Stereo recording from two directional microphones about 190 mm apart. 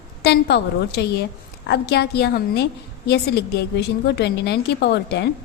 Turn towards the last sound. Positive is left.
turn(degrees=60)  # may be behind; listen again after turning